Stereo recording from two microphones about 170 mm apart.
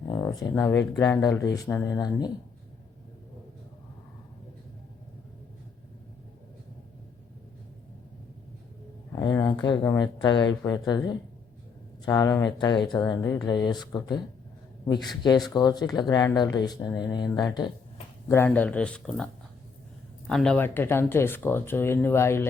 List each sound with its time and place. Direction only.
0.1 s speech: 20° left (ahead or behind)
9.1 s speech: 20° left (ahead or behind)
15.2 s speech: 25° left (ahead or behind)
18.3 s speech: 10° left (ahead or behind)